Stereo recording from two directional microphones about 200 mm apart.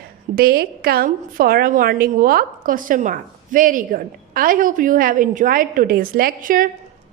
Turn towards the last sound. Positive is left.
turn(degrees=-45)  # may be behind; listen again after turning